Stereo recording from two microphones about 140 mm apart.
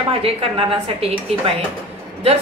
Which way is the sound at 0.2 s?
40° right (ahead or behind).